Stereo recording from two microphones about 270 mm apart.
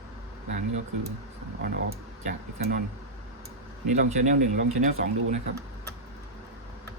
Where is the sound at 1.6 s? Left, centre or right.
Right.